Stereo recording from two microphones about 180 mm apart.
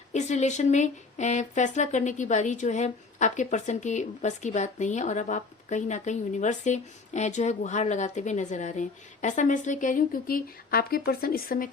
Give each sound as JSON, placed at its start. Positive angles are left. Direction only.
{"t": 0.1, "sound": "speech", "side_deg": 40}